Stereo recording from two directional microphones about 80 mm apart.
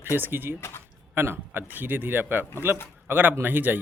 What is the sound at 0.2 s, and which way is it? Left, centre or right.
Speech, right.